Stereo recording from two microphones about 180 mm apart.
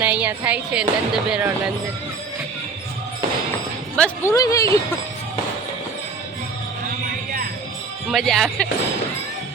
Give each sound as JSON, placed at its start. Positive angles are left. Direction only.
{"t": 0.0, "sound": "speech", "side_deg": -10}
{"t": 3.9, "sound": "speech", "side_deg": 10}
{"t": 8.1, "sound": "speech", "side_deg": 0}